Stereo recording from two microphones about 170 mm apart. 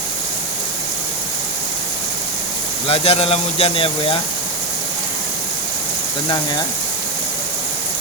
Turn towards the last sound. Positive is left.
turn(degrees=25)  # may be behind; listen again after turning